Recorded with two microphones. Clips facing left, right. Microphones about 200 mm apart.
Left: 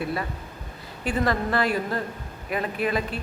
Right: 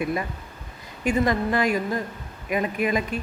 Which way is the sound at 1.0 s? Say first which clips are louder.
Right 3 dB; 15° right (ahead or behind).